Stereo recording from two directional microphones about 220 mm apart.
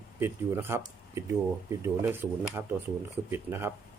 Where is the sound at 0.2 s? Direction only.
10° right (ahead or behind).